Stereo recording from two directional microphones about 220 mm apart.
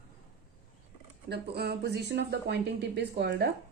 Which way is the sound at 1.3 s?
50° right (ahead or behind).